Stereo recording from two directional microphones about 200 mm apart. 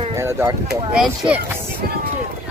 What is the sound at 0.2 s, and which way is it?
Speech, 15° right (ahead or behind).